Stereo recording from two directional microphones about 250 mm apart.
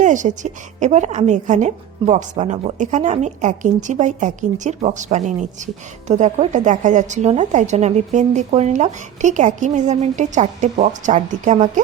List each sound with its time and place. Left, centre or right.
0.0 s a woman's voice: right